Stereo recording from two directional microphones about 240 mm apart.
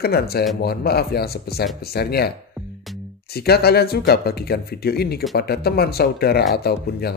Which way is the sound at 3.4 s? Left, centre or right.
Left.